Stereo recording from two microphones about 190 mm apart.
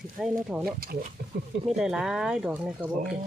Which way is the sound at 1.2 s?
60° right (ahead or behind).